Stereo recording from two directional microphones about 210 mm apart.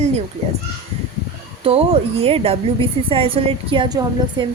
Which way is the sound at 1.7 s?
25° right (ahead or behind).